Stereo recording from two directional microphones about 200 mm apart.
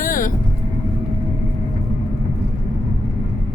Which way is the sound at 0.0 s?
40° left (ahead or behind).